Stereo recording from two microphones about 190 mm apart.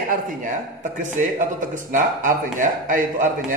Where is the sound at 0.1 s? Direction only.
45° right (ahead or behind).